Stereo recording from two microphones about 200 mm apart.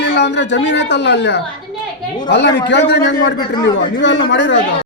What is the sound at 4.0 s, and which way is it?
Speech, 65° left (ahead or behind).